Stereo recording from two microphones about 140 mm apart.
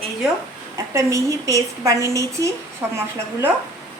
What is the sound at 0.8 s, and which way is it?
A woman's voice, 20° right (ahead or behind).